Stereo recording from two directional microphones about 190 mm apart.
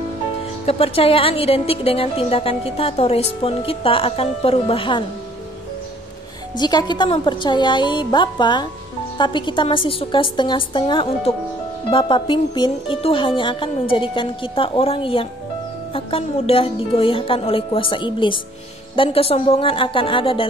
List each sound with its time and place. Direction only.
0.7 s speech: 30° left (ahead or behind)
6.6 s speech: 20° left (ahead or behind)